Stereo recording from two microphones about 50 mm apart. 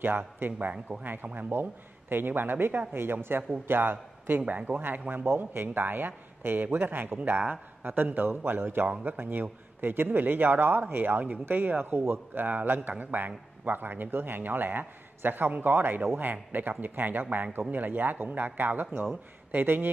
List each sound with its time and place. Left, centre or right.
0.0 s speech: right
0.5 s a man's voice: right